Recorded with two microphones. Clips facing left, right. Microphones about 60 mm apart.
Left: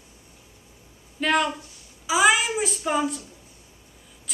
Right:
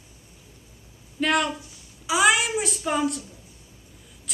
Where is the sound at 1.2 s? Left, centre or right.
Centre.